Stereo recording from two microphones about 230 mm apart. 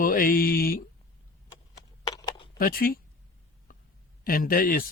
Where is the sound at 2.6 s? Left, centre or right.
Left.